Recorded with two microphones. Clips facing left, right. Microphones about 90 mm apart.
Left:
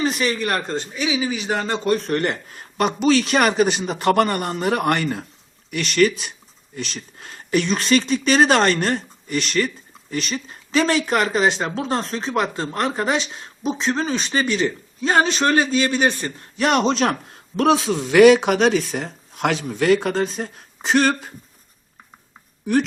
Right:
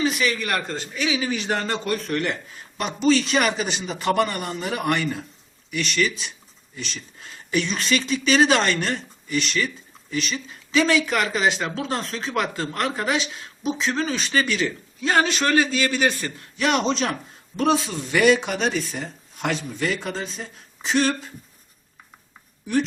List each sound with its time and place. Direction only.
0.0 s speech: 40° left (ahead or behind)
0.9 s a man's voice: 10° left (ahead or behind)
1.8 s speech: 30° left (ahead or behind)
16.6 s a man's voice: 45° left (ahead or behind); by 21.3 s 60° left (ahead or behind)